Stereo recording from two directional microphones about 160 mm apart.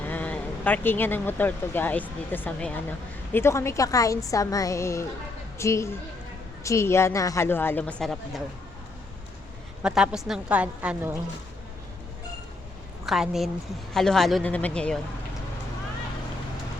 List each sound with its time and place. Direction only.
0.0 s a woman's voice: 10° left (ahead or behind)
9.8 s a woman's voice: 5° right (ahead or behind)
13.1 s speech: centre (ahead or behind)